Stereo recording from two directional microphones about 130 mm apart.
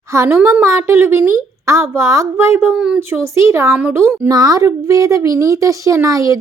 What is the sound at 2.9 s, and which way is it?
Speech, 20° right (ahead or behind).